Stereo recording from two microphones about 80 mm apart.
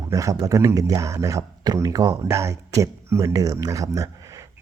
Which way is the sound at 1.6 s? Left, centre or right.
Right.